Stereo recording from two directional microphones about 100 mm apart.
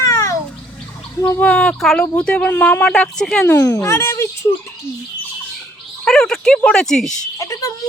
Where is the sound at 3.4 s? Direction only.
25° left (ahead or behind).